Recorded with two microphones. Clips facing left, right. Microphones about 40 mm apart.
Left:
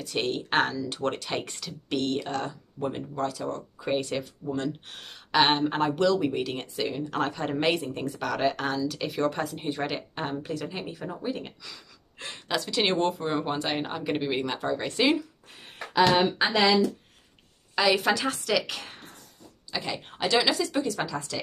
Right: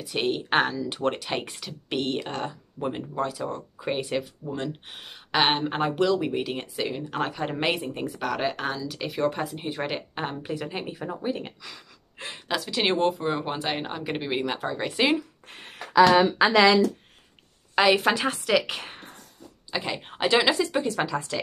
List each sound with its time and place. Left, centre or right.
0.0 s speech: centre
12.4 s speech: centre
17.7 s a woman's voice: right